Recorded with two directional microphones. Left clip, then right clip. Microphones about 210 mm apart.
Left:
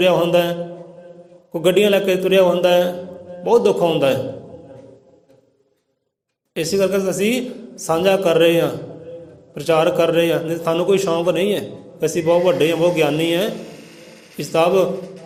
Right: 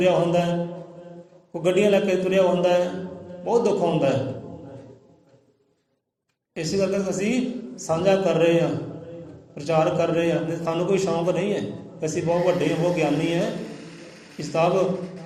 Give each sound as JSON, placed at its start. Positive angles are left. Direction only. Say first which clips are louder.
{"t": 0.0, "sound": "a man's voice", "louder": "left 5 dB", "side_deg": 45}
{"t": 1.5, "sound": "a man's voice", "louder": "left 5 dB", "side_deg": 50}
{"t": 6.5, "sound": "a man's voice", "louder": "left 6 dB", "side_deg": 50}